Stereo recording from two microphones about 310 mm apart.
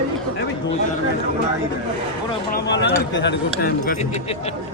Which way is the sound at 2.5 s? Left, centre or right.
Left.